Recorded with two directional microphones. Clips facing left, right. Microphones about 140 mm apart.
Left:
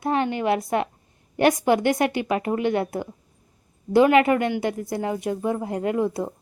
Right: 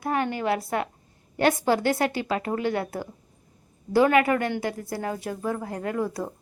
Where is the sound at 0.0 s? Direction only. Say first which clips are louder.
Left 3 dB; 20° left (ahead or behind).